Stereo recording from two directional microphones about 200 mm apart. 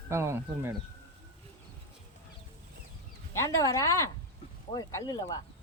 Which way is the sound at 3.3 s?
15° left (ahead or behind).